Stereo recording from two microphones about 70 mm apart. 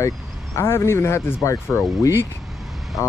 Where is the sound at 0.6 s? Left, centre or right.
Left.